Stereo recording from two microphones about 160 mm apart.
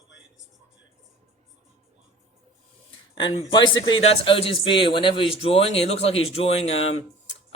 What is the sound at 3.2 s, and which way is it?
Speech, 30° left (ahead or behind).